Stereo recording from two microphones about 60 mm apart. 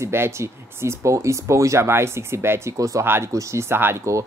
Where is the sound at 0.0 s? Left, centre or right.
Right.